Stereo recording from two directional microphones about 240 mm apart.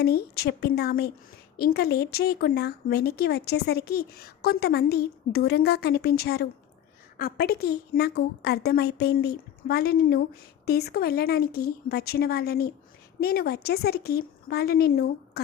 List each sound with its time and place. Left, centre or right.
0.0 s speech: left